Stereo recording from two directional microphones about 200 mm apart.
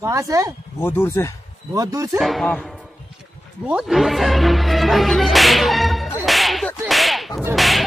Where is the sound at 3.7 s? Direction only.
5° right (ahead or behind).